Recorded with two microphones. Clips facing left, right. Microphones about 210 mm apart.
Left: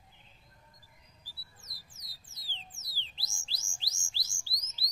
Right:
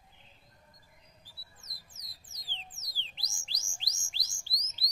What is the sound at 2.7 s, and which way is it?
Music, 20° right (ahead or behind).